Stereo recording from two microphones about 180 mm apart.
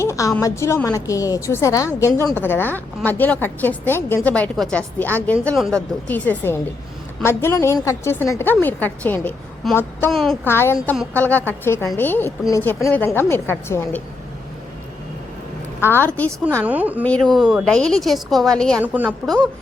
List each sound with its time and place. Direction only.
0.0 s a woman's voice: 15° left (ahead or behind); by 10.3 s centre (ahead or behind)
10.4 s a woman's voice: 15° left (ahead or behind)
15.8 s a woman's voice: 10° left (ahead or behind)
16.6 s a woman's voice: 10° right (ahead or behind)
17.0 s a woman's voice: 5° left (ahead or behind)
18.8 s a woman's voice: 10° right (ahead or behind)